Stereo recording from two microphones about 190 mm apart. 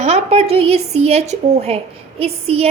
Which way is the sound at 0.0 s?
35° right (ahead or behind).